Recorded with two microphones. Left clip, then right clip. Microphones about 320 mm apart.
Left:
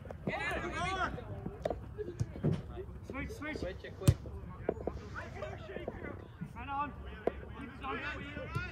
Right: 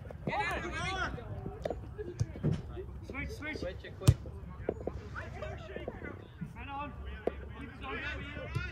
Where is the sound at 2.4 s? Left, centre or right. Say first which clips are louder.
Left 1 dB; left.